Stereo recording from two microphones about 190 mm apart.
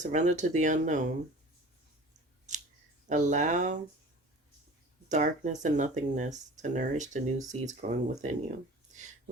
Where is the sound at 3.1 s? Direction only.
40° right (ahead or behind).